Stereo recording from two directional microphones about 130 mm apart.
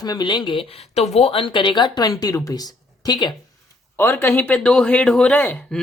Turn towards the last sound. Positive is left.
turn(degrees=10)  # may be behind; listen again after turning